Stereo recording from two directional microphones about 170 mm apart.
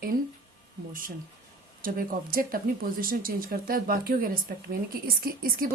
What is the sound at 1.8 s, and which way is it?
Speech, 55° right (ahead or behind).